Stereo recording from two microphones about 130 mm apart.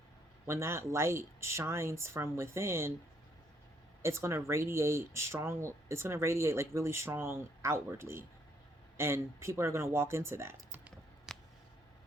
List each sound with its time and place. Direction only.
0.4 s speech: 20° right (ahead or behind)
4.0 s speech: 20° right (ahead or behind)
11.3 s a sound: centre (ahead or behind)